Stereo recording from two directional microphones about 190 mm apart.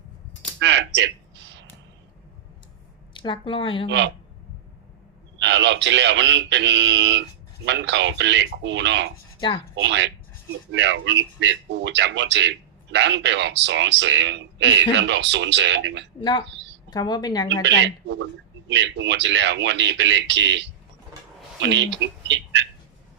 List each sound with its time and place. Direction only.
0.6 s a sound: 70° right (ahead or behind)
3.2 s speech: 25° left (ahead or behind)
3.8 s speech: 70° right (ahead or behind)
5.4 s speech: 70° right (ahead or behind)
16.9 s speech: 20° left (ahead or behind)
17.6 s speech: 70° right (ahead or behind)